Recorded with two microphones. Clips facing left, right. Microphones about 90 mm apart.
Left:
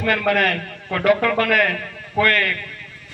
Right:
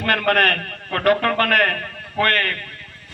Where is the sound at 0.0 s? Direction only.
55° right (ahead or behind).